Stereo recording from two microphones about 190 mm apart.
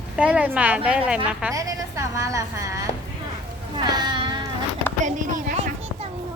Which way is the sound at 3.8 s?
20° right (ahead or behind).